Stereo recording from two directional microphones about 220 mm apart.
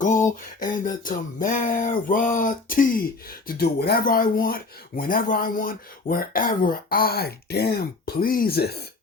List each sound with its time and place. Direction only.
0.0 s speech: 35° left (ahead or behind)